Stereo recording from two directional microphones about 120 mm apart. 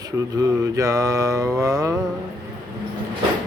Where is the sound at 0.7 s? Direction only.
25° right (ahead or behind).